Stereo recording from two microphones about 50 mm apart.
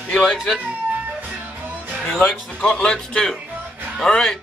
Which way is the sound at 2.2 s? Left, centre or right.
Centre.